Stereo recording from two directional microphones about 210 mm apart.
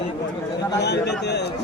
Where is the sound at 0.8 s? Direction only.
55° left (ahead or behind).